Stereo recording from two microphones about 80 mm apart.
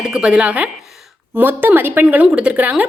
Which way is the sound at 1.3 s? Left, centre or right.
Right.